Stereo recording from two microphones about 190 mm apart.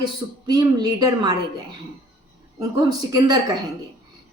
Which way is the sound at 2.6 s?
20° right (ahead or behind).